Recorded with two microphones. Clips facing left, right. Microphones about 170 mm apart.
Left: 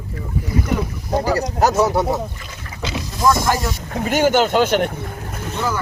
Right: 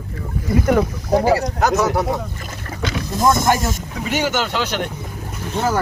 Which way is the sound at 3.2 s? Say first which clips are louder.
Even; 20° right (ahead or behind).